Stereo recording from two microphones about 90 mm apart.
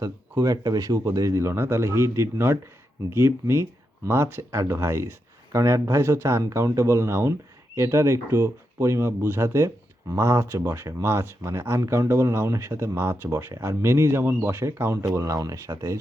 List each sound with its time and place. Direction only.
0.0 s speech: 40° right (ahead or behind)